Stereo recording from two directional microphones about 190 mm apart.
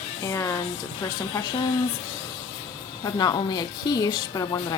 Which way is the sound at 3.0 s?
20° left (ahead or behind).